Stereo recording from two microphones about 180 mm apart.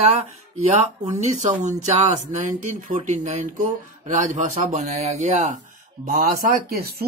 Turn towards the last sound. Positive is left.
turn(degrees=-60)  # may be behind; listen again after turning